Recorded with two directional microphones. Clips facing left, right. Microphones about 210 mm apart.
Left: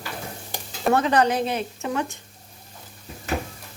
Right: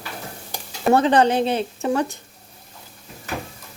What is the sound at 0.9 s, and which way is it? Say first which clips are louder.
A woman's voice: right 4 dB; 30° right (ahead or behind).